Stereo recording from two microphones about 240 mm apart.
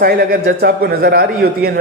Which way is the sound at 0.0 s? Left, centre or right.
Right.